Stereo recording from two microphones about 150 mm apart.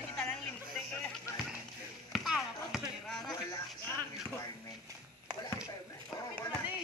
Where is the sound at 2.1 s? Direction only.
Centre (ahead or behind).